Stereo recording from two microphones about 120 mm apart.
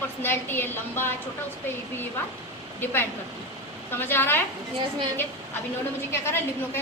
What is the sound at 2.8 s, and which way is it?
A woman's voice, 20° left (ahead or behind).